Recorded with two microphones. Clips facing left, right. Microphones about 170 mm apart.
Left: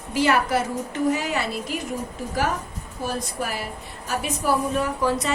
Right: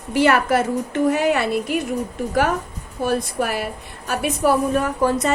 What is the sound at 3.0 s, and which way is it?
A woman's voice, 65° right (ahead or behind).